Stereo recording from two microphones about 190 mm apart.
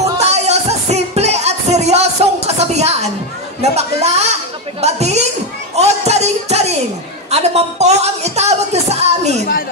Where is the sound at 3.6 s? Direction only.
35° right (ahead or behind).